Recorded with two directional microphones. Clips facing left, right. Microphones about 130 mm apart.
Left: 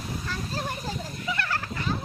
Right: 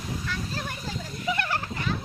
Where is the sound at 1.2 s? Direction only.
20° right (ahead or behind).